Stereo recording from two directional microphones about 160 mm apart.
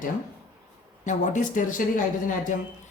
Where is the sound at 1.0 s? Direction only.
50° left (ahead or behind).